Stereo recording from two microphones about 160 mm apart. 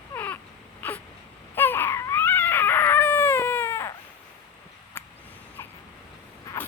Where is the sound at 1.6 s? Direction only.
15° left (ahead or behind).